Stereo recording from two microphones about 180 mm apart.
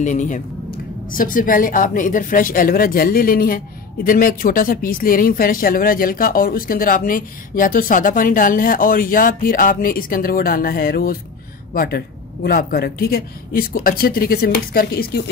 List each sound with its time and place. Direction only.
0.0 s speech: 45° left (ahead or behind); by 15.2 s 60° left (ahead or behind)